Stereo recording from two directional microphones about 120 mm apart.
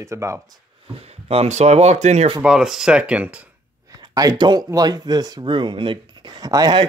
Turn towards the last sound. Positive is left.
turn(degrees=-35)  # may be behind; listen again after turning